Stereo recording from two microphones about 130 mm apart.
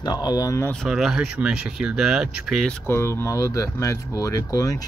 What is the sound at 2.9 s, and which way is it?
Speech, 20° left (ahead or behind).